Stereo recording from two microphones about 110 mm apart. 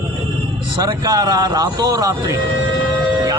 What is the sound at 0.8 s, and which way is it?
Speech, 35° right (ahead or behind).